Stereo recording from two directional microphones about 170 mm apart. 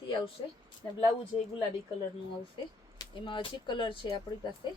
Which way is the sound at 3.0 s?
30° left (ahead or behind).